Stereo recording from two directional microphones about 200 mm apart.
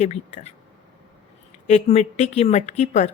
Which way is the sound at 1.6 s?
35° left (ahead or behind).